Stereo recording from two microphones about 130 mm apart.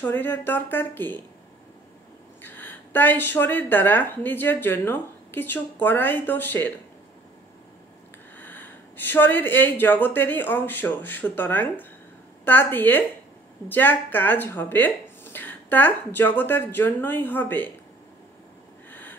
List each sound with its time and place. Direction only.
0.0 s a woman's voice: 15° left (ahead or behind)
2.4 s a woman's voice: 15° left (ahead or behind)
8.4 s a woman's voice: 15° left (ahead or behind)
18.9 s a sound: 15° left (ahead or behind)